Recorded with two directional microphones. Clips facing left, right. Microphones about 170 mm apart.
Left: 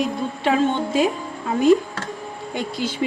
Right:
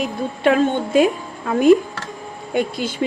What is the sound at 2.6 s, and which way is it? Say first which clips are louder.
Speech: right 5 dB; 50° right (ahead or behind).